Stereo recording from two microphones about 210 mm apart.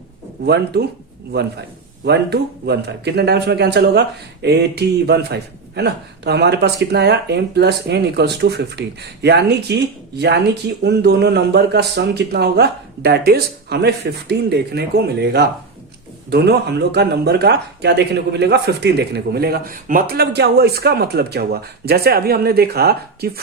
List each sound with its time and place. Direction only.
0.4 s speech: 50° right (ahead or behind)